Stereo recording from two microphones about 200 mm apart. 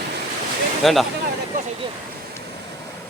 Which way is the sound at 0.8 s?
Centre (ahead or behind).